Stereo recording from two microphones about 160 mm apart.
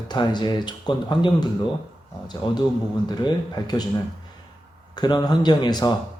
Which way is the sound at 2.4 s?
30° left (ahead or behind).